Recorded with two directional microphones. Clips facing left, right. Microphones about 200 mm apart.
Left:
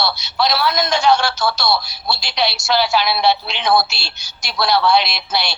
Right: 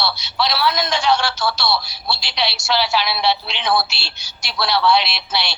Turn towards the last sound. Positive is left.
turn(degrees=45)  # may be behind; listen again after turning